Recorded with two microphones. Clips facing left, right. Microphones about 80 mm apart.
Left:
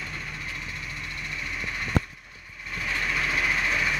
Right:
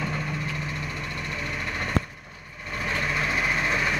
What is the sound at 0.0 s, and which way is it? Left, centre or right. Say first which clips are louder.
Vehicle: right 7 dB; right.